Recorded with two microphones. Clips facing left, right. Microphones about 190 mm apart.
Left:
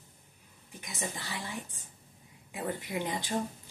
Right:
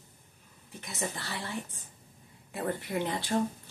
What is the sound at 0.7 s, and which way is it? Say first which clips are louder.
A woman's voice: right 2 dB; 15° left (ahead or behind).